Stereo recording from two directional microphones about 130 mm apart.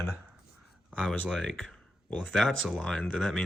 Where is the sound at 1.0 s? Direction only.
10° left (ahead or behind).